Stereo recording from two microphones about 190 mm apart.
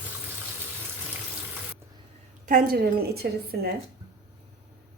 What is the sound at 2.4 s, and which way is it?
A woman's voice, 45° right (ahead or behind).